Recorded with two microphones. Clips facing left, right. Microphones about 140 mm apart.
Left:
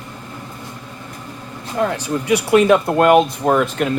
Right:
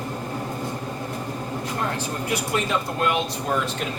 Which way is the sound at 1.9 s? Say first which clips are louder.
Left 8 dB; 85° left.